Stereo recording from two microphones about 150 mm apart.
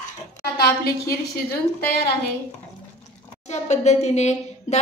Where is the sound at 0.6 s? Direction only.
90° left.